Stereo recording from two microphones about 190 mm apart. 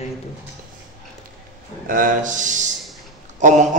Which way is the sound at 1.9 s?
45° right (ahead or behind).